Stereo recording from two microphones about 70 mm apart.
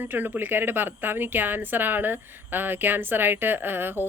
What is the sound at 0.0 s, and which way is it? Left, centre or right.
A woman's voice, right.